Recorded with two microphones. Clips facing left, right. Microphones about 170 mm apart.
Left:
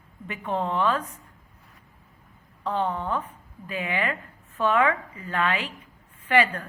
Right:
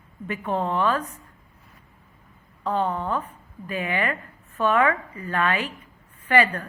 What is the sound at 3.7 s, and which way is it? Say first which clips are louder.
A woman's voice: right 2 dB; 15° left (ahead or behind).